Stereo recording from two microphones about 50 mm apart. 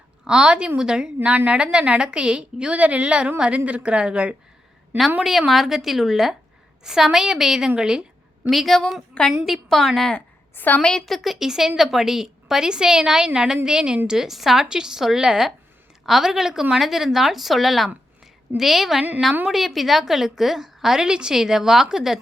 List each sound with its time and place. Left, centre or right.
0.3 s a woman's voice: centre
5.2 s a woman's voice: centre
8.4 s speech: centre
10.5 s a woman's voice: left
10.8 s a woman's voice: centre